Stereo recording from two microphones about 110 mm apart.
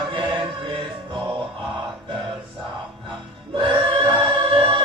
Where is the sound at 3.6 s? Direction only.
50° right (ahead or behind).